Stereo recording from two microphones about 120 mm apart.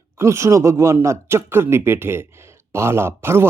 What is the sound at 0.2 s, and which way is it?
Speech, 25° right (ahead or behind).